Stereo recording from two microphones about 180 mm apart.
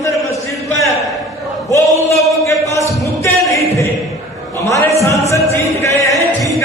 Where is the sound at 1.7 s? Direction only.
15° left (ahead or behind).